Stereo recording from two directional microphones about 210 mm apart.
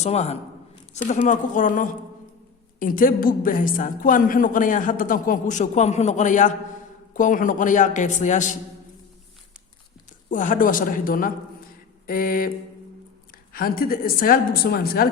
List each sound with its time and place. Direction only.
0.0 s a woman's voice: 30° left (ahead or behind)
10.2 s a woman's voice: 40° left (ahead or behind)
13.5 s a woman's voice: 45° left (ahead or behind)